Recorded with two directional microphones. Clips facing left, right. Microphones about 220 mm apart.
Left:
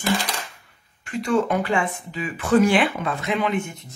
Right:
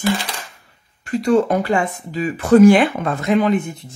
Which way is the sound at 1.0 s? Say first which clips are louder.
Right 6 dB; 35° right (ahead or behind).